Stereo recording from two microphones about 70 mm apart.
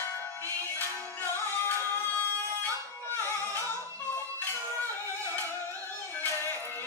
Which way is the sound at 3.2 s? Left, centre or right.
Left.